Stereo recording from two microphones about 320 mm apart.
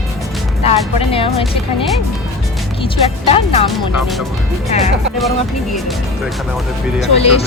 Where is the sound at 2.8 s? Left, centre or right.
Centre.